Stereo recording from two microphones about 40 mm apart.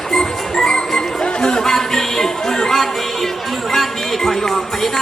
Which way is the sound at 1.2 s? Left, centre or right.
Centre.